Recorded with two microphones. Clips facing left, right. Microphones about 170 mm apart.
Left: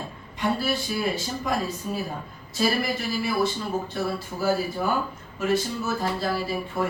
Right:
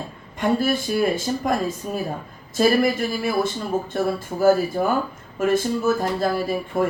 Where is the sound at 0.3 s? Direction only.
50° right (ahead or behind).